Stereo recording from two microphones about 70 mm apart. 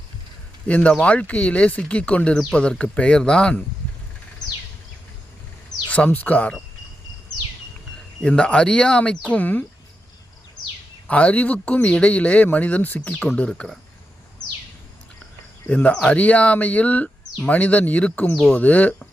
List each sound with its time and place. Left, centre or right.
0.7 s speech: centre
5.9 s speech: left
8.2 s speech: centre
9.3 s speech: left
11.1 s speech: centre
15.6 s speech: centre